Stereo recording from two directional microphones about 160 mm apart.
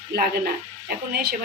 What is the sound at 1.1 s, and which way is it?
Speech, 85° right.